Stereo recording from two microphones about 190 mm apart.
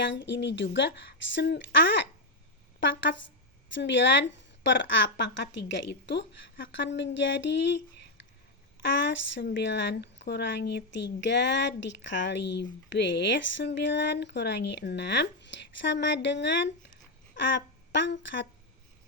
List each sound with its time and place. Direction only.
0.0 s speech: 70° left (ahead or behind)